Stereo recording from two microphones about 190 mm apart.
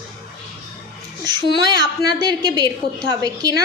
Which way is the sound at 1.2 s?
20° right (ahead or behind).